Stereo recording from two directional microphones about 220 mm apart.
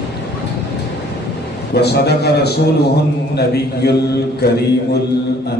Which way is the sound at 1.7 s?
45° left (ahead or behind).